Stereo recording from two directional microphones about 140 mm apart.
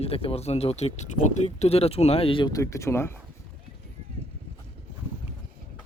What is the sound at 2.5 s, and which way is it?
Speech, 25° left (ahead or behind).